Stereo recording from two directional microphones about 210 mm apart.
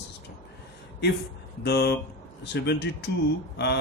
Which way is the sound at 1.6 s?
50° left (ahead or behind).